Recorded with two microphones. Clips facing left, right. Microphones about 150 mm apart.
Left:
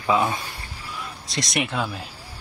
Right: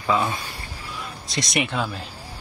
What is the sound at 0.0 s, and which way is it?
Speech, 10° left (ahead or behind).